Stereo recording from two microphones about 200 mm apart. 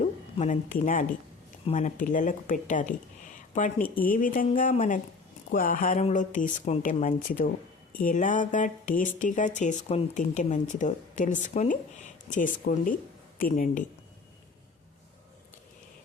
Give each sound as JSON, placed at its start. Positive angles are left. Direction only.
{"t": 0.0, "sound": "a woman's voice", "side_deg": 35}